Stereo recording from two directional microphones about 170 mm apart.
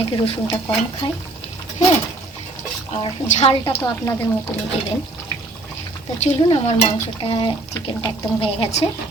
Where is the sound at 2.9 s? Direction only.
35° left (ahead or behind).